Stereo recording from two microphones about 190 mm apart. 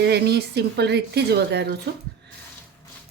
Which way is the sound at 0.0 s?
60° right (ahead or behind).